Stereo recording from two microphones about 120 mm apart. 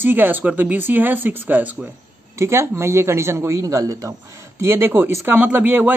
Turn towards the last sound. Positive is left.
turn(degrees=-15)  # may be behind; listen again after turning